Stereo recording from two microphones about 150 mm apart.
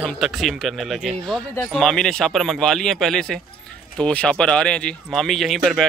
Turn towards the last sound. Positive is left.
turn(degrees=0)  # may be behind; listen again after turning